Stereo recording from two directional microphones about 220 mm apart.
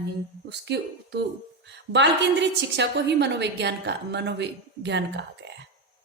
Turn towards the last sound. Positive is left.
turn(degrees=-50)  # may be behind; listen again after turning